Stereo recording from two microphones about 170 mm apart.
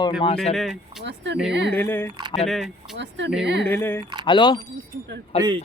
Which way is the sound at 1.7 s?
10° left (ahead or behind).